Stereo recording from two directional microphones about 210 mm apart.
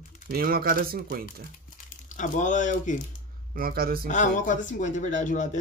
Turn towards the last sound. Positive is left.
turn(degrees=35)  # may be behind; listen again after turning